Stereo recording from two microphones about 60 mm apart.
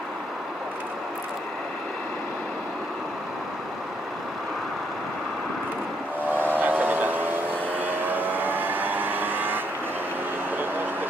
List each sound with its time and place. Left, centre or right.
6.3 s vehicle: right